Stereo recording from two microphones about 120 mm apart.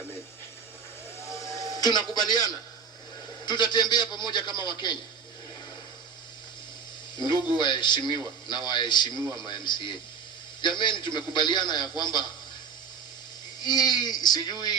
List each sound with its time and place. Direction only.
1.3 s music: 25° left (ahead or behind)
3.4 s a man's voice: 35° left (ahead or behind)
7.2 s a man's voice: 40° left (ahead or behind)
13.6 s a man's voice: 35° left (ahead or behind)